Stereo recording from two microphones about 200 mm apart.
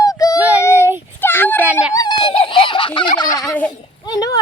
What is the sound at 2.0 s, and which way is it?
Fowl, 25° left (ahead or behind).